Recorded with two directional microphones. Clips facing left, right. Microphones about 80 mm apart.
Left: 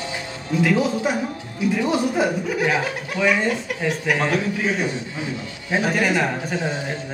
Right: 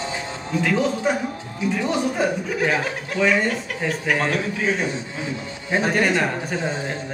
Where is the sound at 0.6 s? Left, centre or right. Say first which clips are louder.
Left 2 dB; centre.